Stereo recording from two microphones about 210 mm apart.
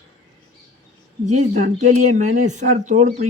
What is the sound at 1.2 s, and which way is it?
Speech, 35° right (ahead or behind).